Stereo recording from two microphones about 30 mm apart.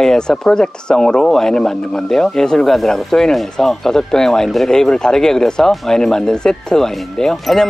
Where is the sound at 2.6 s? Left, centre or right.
Centre.